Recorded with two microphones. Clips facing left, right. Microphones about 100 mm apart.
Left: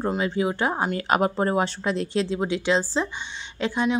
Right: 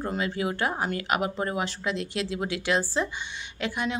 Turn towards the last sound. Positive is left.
turn(degrees=25)  # may be behind; listen again after turning